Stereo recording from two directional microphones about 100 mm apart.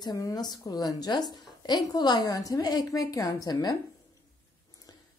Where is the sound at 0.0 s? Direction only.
40° left (ahead or behind).